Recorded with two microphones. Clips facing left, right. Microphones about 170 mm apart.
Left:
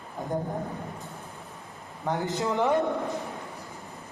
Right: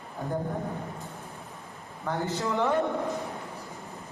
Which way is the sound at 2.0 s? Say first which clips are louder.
Left 2 dB; 20° left (ahead or behind).